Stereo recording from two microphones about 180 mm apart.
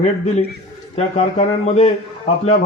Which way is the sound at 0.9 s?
35° left (ahead or behind).